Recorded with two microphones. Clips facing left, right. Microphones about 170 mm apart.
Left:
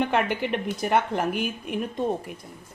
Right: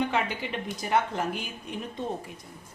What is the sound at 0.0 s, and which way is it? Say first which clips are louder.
A woman's voice: left 4 dB; 60° left (ahead or behind).